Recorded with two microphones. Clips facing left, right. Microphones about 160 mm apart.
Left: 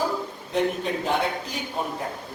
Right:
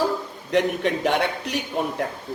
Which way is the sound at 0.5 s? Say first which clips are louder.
Right 3 dB; 75° right (ahead or behind).